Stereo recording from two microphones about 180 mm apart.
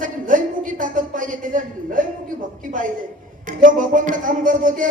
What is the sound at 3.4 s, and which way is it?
A woman's voice, 45° right (ahead or behind).